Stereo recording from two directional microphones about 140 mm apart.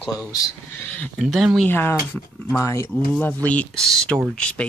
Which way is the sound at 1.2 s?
Centre (ahead or behind).